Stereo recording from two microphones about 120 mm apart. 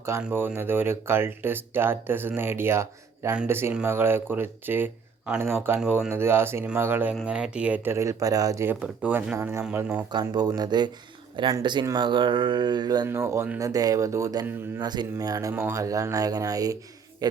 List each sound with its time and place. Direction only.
0.2 s speech: 15° right (ahead or behind)
7.9 s speech: 25° right (ahead or behind)
9.7 s speech: 10° right (ahead or behind)
10.1 s mantra: 35° right (ahead or behind)
13.1 s speech: 25° right (ahead or behind)